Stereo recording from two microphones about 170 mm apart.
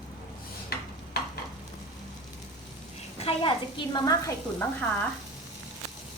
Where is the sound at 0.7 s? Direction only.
70° left (ahead or behind).